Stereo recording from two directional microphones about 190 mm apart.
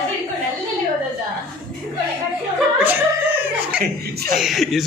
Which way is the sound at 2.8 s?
10° right (ahead or behind).